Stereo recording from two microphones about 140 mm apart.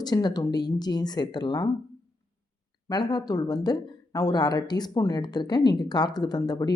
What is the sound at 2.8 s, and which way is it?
Speech, 30° left (ahead or behind).